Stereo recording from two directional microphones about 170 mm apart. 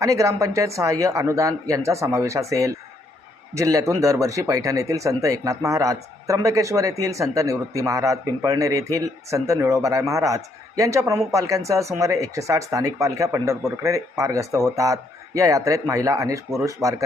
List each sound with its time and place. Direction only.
0.0 s speech: 20° right (ahead or behind)